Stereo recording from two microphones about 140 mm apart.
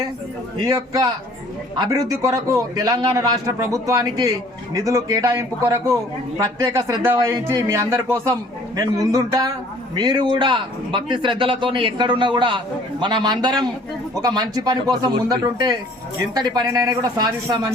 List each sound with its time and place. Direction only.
0.6 s a man's voice: 25° right (ahead or behind)